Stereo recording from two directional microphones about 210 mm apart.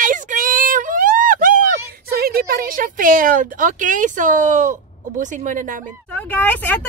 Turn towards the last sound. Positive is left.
turn(degrees=10)  # may be behind; listen again after turning